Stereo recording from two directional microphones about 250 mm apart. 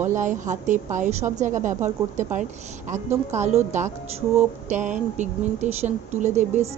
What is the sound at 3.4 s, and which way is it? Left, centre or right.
Speech, right.